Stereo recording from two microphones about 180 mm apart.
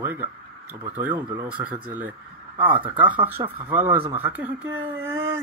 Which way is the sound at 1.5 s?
10° right (ahead or behind).